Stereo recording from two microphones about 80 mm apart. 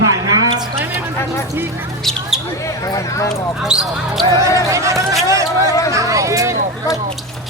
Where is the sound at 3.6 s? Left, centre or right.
Centre.